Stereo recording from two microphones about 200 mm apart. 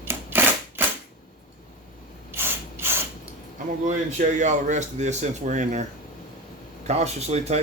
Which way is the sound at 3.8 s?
35° right (ahead or behind).